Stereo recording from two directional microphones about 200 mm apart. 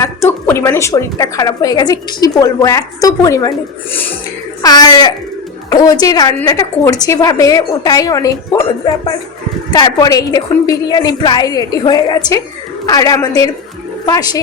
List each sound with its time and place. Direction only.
0.0 s a woman's voice: 15° left (ahead or behind)
4.6 s a woman's voice: 20° left (ahead or behind)
9.7 s a woman's voice: 20° left (ahead or behind)